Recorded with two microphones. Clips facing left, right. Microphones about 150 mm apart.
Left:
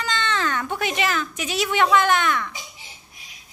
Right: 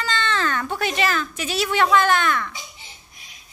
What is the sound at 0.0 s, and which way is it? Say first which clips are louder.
Speech: right 1 dB; 15° left (ahead or behind).